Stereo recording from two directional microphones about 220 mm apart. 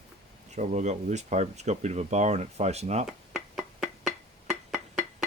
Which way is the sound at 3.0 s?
Centre (ahead or behind).